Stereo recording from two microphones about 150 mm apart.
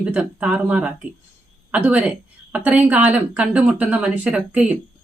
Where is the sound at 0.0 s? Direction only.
10° right (ahead or behind).